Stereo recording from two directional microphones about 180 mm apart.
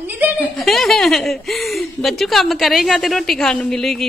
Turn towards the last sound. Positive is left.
turn(degrees=0)  # may be behind; listen again after turning